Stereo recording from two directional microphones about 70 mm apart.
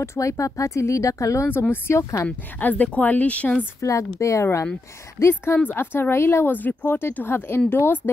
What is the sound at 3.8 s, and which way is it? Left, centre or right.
Speech, left.